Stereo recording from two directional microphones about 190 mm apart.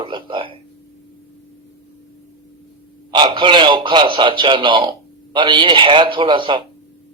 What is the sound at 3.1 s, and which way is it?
Speech, 25° right (ahead or behind).